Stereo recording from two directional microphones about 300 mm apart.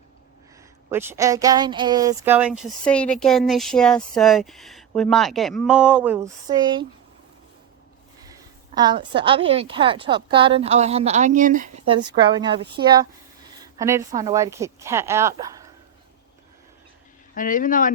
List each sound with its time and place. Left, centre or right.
0.9 s a woman's voice: centre
8.3 s a woman's voice: centre
11.9 s a woman's voice: centre
17.3 s speech: left